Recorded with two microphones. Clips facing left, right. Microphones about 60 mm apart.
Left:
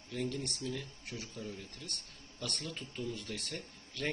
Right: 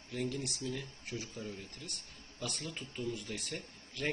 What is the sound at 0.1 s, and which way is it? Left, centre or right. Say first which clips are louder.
Speech: even; centre.